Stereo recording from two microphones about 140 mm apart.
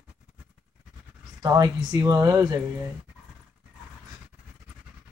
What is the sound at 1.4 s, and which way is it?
Speech, 25° right (ahead or behind).